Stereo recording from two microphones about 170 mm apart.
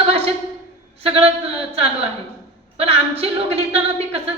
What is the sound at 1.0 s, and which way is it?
A woman's voice, 35° right (ahead or behind).